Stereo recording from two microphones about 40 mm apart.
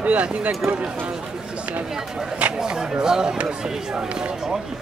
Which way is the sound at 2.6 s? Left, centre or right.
Centre.